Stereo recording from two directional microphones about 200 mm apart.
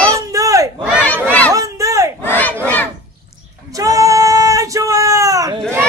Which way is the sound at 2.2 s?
10° left (ahead or behind).